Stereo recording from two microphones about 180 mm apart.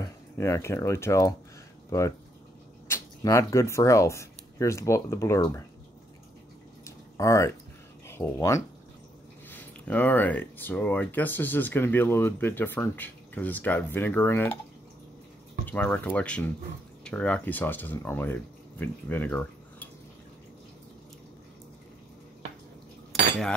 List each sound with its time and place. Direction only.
0.0 s speech: 15° left (ahead or behind)
7.2 s speech: 15° left (ahead or behind)
15.6 s speech: 10° left (ahead or behind)